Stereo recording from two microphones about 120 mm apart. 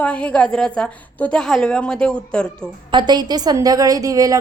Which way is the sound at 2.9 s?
40° right (ahead or behind).